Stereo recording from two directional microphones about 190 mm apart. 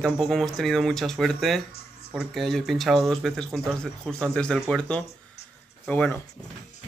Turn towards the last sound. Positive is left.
turn(degrees=10)  # may be behind; listen again after turning